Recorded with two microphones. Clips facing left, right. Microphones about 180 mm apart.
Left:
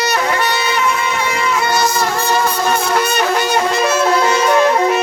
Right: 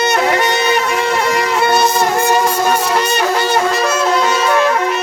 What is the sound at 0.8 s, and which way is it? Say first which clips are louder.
Music: right 2 dB; 70° right (ahead or behind).